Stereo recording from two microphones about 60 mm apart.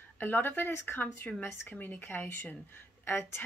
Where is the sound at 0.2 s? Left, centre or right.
Left.